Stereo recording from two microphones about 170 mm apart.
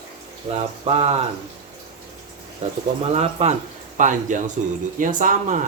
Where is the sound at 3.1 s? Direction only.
40° right (ahead or behind).